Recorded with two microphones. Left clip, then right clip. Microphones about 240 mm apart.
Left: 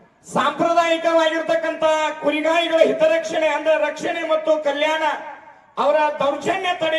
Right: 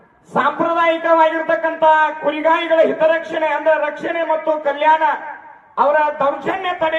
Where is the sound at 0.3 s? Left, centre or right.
Left.